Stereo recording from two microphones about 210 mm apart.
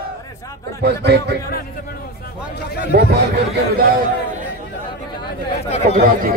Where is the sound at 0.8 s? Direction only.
50° right (ahead or behind).